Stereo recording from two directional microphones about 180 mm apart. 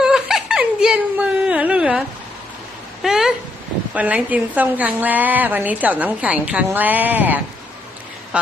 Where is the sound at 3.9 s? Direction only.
10° right (ahead or behind).